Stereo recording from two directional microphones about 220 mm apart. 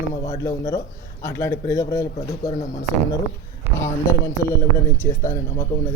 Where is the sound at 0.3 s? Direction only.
15° left (ahead or behind).